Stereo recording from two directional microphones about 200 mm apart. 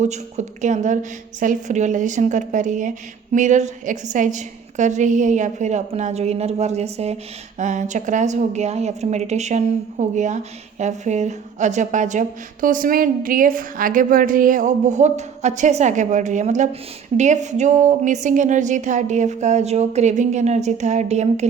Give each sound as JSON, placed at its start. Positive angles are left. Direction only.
{"t": 0.0, "sound": "a woman's voice", "side_deg": -35}